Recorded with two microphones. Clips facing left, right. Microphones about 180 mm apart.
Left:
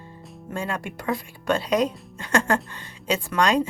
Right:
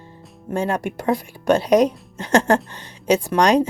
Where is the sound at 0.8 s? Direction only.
40° right (ahead or behind).